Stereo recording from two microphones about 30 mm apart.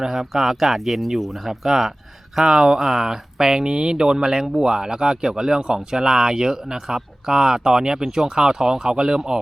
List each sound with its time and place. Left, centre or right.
0.0 s speech: centre